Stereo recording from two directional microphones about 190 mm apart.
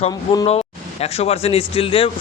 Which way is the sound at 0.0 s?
30° left (ahead or behind).